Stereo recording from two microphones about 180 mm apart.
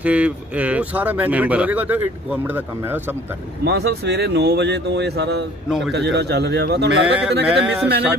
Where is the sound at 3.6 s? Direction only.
65° right (ahead or behind).